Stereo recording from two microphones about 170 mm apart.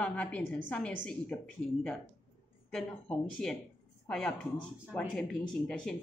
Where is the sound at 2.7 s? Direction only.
5° left (ahead or behind).